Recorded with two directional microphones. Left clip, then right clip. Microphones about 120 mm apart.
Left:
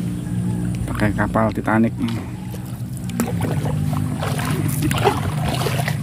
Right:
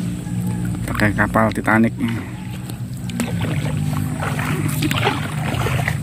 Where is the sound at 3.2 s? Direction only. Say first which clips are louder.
Left 1 dB; 45° left (ahead or behind).